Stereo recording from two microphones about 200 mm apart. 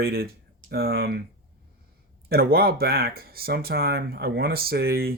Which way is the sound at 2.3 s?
50° right (ahead or behind).